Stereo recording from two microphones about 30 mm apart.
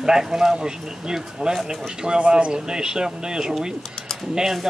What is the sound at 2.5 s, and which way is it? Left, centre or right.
Speech, right.